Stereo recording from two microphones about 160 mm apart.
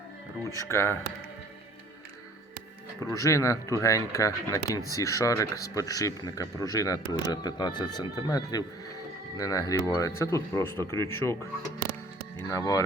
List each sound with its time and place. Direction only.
0.5 s speech: 15° left (ahead or behind)
3.0 s speech: 20° left (ahead or behind)
12.4 s speech: 20° left (ahead or behind)